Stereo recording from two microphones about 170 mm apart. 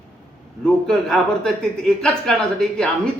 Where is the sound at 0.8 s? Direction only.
5° left (ahead or behind).